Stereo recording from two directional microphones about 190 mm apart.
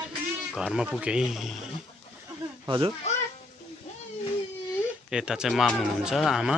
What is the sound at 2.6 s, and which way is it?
Speech, 25° right (ahead or behind).